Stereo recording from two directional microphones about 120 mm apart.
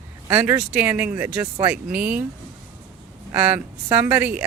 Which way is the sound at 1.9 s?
10° right (ahead or behind).